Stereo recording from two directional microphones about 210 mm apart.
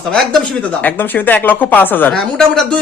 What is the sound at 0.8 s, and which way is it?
A woman's voice, 10° left (ahead or behind).